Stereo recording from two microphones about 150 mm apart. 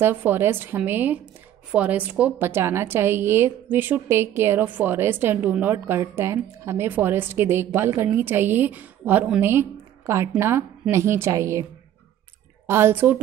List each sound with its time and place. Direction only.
0.0 s a woman's voice: 15° right (ahead or behind)
12.6 s a woman's voice: 15° right (ahead or behind)